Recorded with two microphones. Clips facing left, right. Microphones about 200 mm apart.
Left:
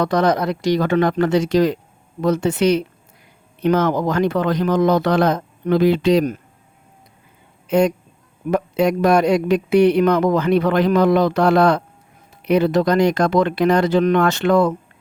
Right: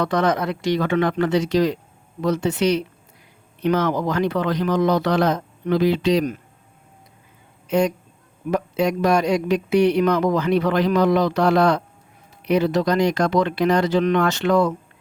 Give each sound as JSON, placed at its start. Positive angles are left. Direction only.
{"t": 0.0, "sound": "speech", "side_deg": 40}
{"t": 7.7, "sound": "speech", "side_deg": 55}